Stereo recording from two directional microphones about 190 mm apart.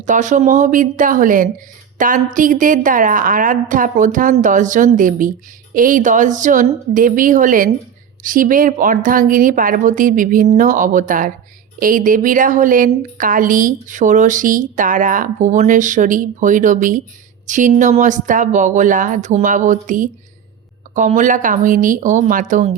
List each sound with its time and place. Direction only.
0.0 s a woman's voice: 40° right (ahead or behind)